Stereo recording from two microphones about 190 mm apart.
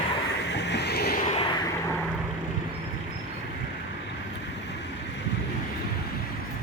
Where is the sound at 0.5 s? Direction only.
65° left (ahead or behind).